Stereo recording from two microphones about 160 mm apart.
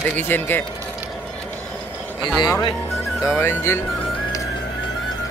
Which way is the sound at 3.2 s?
15° left (ahead or behind).